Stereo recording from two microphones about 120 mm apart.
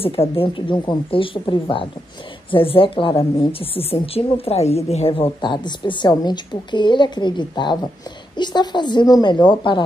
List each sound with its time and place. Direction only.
0.0 s a woman's voice: 50° left (ahead or behind)